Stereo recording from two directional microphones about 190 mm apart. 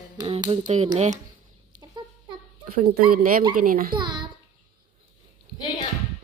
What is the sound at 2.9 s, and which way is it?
A woman's voice, 50° right (ahead or behind).